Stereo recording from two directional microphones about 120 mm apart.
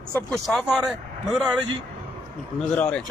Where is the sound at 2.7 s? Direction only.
15° left (ahead or behind).